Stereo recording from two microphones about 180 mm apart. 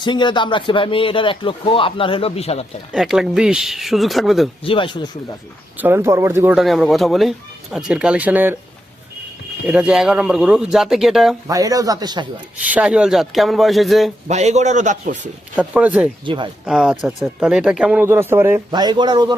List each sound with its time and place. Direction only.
0.0 s speech: 25° left (ahead or behind)
2.9 s speech: centre (ahead or behind)
4.6 s speech: 30° left (ahead or behind)
5.7 s speech: 10° right (ahead or behind)
6.6 s speech: centre (ahead or behind)
9.6 s speech: 5° right (ahead or behind)
11.4 s speech: 20° right (ahead or behind)
12.6 s speech: 5° right (ahead or behind)
14.3 s a man's voice: 40° right (ahead or behind)
15.5 s speech: 10° right (ahead or behind)
16.2 s speech: 25° right (ahead or behind)
16.6 s speech: 5° right (ahead or behind); by 19.3 s 25° right (ahead or behind)